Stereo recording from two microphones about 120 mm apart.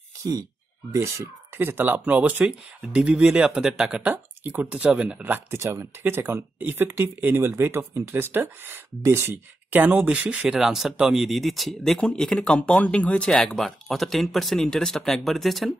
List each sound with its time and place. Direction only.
0.2 s speech: 30° right (ahead or behind); by 15.7 s centre (ahead or behind)